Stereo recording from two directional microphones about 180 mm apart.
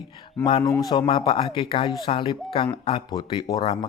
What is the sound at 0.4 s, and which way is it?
Speech, 25° left (ahead or behind).